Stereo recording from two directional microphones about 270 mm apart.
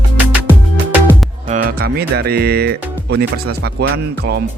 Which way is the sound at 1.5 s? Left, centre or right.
Right.